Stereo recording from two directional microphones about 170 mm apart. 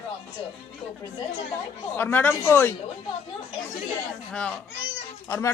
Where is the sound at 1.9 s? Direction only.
10° left (ahead or behind).